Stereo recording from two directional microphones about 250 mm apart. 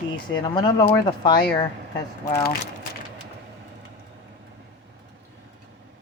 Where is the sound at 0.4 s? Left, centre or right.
Centre.